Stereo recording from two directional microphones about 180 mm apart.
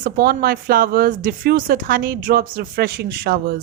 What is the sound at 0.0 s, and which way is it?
Speech, 55° right (ahead or behind).